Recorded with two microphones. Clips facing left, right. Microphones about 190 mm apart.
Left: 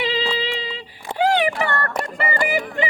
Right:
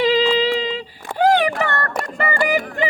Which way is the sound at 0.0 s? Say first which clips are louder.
Right 7 dB; 40° right (ahead or behind).